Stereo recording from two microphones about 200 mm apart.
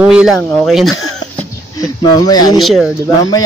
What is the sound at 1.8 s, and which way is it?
Speech, 20° left (ahead or behind).